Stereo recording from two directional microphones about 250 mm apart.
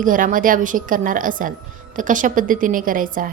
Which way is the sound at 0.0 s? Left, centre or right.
Right.